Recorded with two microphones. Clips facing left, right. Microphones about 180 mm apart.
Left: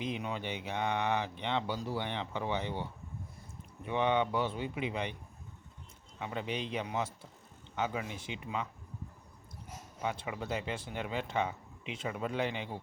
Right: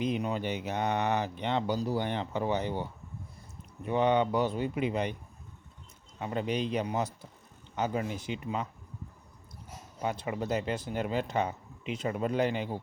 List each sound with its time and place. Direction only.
0.0 s speech: 40° right (ahead or behind)
3.8 s speech: 40° right (ahead or behind)
6.1 s speech: 40° right (ahead or behind)
10.0 s speech: 40° right (ahead or behind)